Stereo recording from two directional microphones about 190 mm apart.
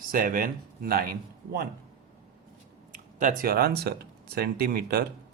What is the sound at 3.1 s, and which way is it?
Speech, 45° right (ahead or behind).